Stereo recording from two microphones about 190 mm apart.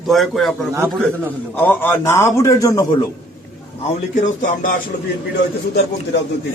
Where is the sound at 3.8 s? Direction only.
40° left (ahead or behind).